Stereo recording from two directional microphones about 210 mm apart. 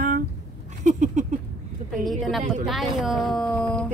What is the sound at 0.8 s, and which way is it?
Speech, 35° right (ahead or behind).